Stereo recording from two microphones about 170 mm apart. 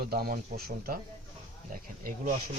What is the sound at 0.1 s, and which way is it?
Speech, 65° right (ahead or behind).